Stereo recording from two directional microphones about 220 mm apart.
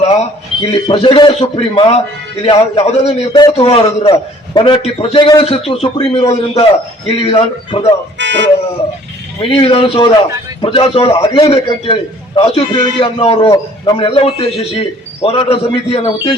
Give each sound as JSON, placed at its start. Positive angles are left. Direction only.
{"t": 0.6, "sound": "a man's voice", "side_deg": 25}
{"t": 8.2, "sound": "dog", "side_deg": -55}
{"t": 9.4, "sound": "a man's voice", "side_deg": 25}